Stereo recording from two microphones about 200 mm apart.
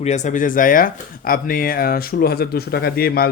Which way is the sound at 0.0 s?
35° left (ahead or behind).